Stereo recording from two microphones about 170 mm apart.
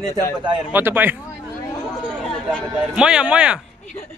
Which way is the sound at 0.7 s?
10° right (ahead or behind).